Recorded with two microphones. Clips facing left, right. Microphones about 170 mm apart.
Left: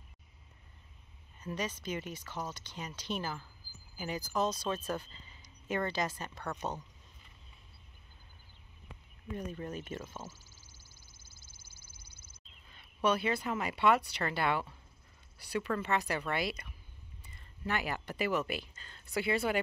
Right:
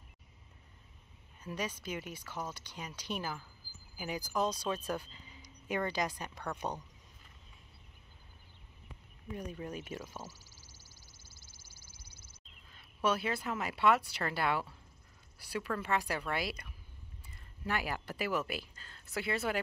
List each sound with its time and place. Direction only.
1.4 s speech: 10° right (ahead or behind)
9.3 s speech: 10° right (ahead or behind)
10.3 s crow: 90° right
12.6 s speech: 5° right (ahead or behind)